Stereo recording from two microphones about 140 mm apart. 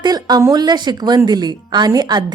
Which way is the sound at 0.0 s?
30° right (ahead or behind).